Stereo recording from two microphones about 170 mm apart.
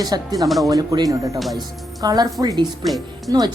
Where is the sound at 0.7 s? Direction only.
20° right (ahead or behind).